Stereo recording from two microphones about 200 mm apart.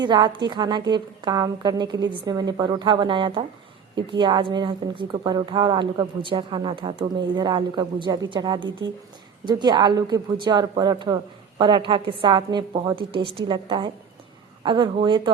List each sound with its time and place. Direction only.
0.0 s speech: 20° right (ahead or behind)